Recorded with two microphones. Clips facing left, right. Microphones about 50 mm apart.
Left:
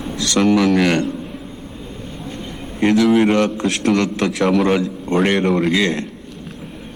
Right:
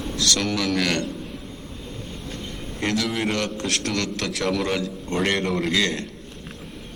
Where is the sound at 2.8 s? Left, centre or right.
Left; by 5.3 s centre.